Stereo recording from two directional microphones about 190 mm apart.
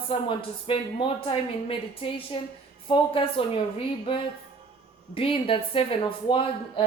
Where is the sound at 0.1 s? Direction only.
25° left (ahead or behind).